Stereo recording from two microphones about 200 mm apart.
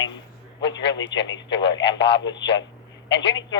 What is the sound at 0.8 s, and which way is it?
Speech, 65° left (ahead or behind).